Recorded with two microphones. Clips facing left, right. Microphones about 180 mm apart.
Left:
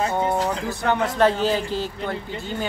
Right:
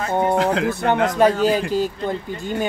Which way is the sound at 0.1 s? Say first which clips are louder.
Right 4 dB; 20° right (ahead or behind).